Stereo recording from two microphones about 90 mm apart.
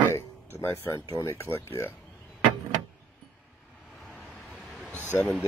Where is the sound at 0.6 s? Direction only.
30° left (ahead or behind).